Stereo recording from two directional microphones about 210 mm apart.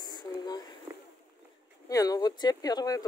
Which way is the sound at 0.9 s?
15° right (ahead or behind).